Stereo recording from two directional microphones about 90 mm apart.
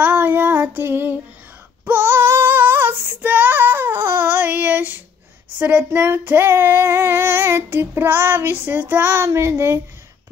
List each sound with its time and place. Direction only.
0.0 s child singing: 20° right (ahead or behind)
5.6 s speech: 15° right (ahead or behind)
5.9 s child singing: 25° right (ahead or behind)